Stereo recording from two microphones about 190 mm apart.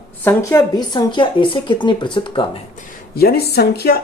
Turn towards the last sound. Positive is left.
turn(degrees=55)  # may be behind; listen again after turning